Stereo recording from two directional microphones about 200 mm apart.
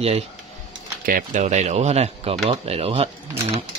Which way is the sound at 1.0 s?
40° right (ahead or behind).